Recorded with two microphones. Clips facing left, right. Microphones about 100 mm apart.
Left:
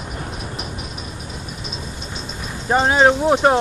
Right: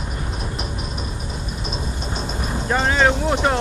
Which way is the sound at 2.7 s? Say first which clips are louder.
Left 4 dB; 20° left (ahead or behind).